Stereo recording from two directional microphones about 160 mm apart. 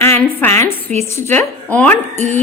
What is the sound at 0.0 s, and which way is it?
A woman's voice, 15° left (ahead or behind).